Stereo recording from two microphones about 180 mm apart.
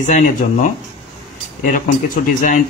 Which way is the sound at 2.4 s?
50° left (ahead or behind).